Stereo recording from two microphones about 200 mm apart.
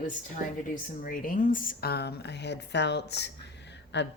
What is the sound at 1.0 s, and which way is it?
Speech, 45° left (ahead or behind).